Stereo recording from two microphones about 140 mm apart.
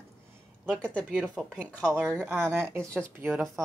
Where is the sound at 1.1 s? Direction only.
5° right (ahead or behind).